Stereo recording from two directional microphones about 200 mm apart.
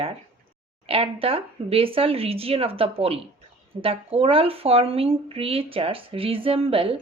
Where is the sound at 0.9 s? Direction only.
30° right (ahead or behind).